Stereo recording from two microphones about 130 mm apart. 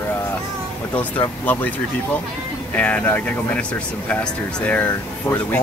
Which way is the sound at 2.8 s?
10° left (ahead or behind).